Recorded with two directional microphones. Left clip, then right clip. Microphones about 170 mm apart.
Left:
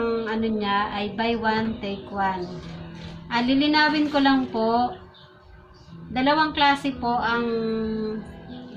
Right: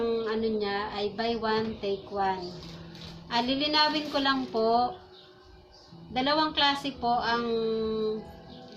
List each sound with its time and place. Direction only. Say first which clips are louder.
0.0 s a woman's voice: left 3 dB; 10° right (ahead or behind)
6.1 s a woman's voice: left 5 dB; 10° right (ahead or behind)